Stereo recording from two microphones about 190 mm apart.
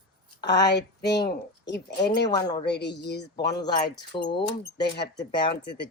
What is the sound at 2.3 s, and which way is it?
Speech, 20° left (ahead or behind).